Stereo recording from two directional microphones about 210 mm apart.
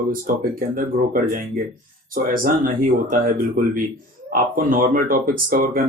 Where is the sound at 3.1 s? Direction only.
40° right (ahead or behind).